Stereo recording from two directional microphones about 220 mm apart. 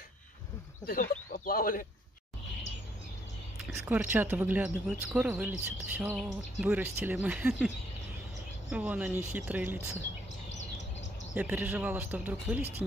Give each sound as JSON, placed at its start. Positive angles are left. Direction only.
{"t": 0.8, "sound": "speech", "side_deg": 40}
{"t": 3.7, "sound": "speech", "side_deg": -10}
{"t": 5.9, "sound": "bird", "side_deg": -5}
{"t": 6.6, "sound": "speech", "side_deg": -10}
{"t": 11.3, "sound": "speech", "side_deg": -10}